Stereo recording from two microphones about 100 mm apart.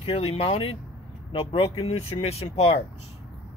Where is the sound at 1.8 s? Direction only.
90° left.